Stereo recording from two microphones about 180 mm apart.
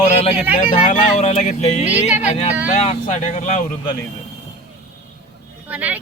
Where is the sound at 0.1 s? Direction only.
35° left (ahead or behind).